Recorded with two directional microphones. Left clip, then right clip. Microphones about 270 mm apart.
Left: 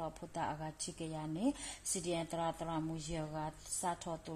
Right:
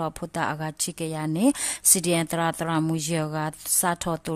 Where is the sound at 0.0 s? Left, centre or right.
Right.